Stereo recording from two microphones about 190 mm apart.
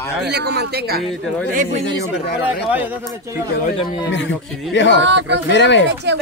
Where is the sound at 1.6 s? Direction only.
35° right (ahead or behind).